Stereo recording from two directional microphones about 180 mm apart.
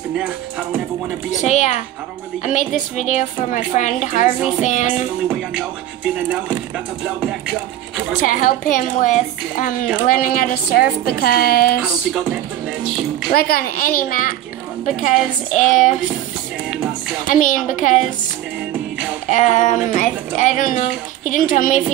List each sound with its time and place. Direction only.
1.4 s a woman's voice: 40° left (ahead or behind)
4.4 s speech: 5° right (ahead or behind)
4.6 s speech: 45° left (ahead or behind)
5.3 s music: 5° right (ahead or behind)
8.3 s a woman's voice: 50° left (ahead or behind)
13.3 s speech: 55° left (ahead or behind)
16.7 s music: 5° right (ahead or behind)
17.3 s speech: 45° left (ahead or behind)
19.2 s speech: 45° left (ahead or behind)